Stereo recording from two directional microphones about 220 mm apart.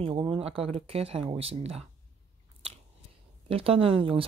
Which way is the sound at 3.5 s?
25° right (ahead or behind).